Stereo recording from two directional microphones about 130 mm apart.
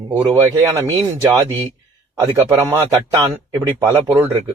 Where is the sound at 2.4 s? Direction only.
25° right (ahead or behind).